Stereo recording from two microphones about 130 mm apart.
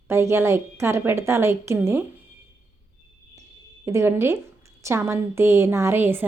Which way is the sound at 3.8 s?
20° right (ahead or behind).